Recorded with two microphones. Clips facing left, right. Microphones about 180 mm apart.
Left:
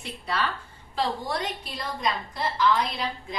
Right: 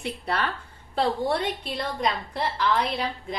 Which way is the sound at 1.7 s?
65° right (ahead or behind).